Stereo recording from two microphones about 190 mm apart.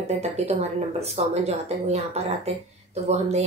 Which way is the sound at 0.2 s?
35° right (ahead or behind).